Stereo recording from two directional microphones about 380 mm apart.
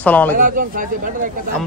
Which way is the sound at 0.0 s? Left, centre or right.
Centre.